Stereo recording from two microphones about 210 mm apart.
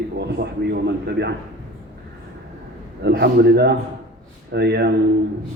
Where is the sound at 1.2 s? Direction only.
50° right (ahead or behind).